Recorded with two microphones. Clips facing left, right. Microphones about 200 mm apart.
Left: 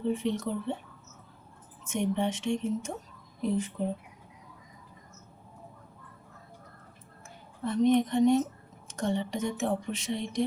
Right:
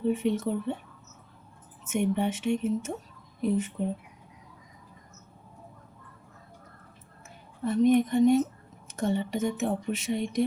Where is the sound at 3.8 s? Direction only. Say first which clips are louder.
Right 1 dB; 35° left (ahead or behind).